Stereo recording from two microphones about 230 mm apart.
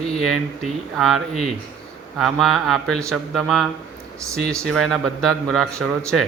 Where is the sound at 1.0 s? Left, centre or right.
Centre.